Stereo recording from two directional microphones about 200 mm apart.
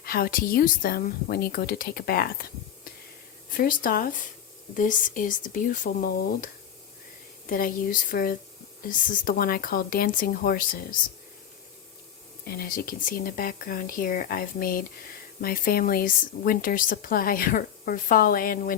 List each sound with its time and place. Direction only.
0.0 s a woman's voice: 50° left (ahead or behind)
3.5 s a woman's voice: 45° left (ahead or behind)
12.5 s a woman's voice: 50° left (ahead or behind)